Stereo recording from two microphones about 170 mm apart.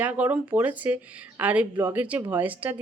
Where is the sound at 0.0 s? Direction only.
10° right (ahead or behind).